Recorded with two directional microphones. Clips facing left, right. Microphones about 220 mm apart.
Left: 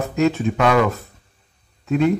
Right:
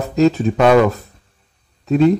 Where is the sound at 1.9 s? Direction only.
35° right (ahead or behind).